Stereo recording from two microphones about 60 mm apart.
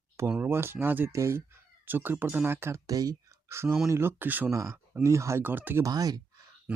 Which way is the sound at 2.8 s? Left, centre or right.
Right.